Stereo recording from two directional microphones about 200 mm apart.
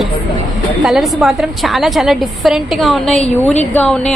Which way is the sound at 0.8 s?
Centre (ahead or behind).